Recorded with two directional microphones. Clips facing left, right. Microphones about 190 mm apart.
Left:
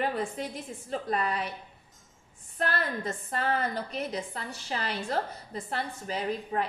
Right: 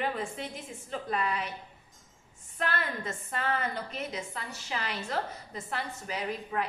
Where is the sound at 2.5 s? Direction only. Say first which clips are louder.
Left 2 dB; 35° left (ahead or behind).